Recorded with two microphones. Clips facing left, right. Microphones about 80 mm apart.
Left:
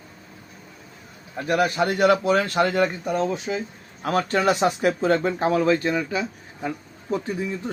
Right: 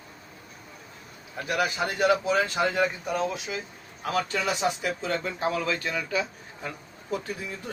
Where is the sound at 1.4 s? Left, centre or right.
Left.